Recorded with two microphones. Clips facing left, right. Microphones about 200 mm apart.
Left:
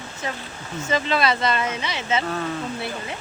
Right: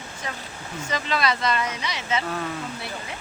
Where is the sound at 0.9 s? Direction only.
25° left (ahead or behind).